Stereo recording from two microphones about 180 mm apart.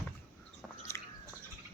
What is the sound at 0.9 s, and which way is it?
Biting, 15° left (ahead or behind).